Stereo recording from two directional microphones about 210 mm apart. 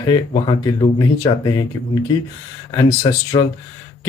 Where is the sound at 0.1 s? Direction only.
20° left (ahead or behind).